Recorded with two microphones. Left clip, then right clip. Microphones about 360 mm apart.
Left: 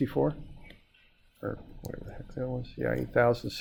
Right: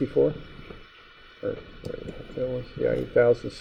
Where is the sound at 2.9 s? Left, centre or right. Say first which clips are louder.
Right 5 dB; left.